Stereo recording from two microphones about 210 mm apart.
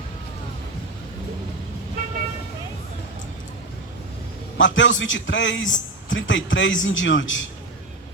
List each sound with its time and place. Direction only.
4.5 s a man's voice: 65° left (ahead or behind)